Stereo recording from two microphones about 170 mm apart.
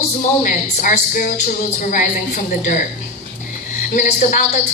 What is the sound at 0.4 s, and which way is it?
Speech, 50° left (ahead or behind).